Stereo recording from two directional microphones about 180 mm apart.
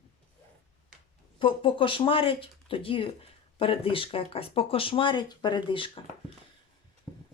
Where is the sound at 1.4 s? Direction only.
30° left (ahead or behind).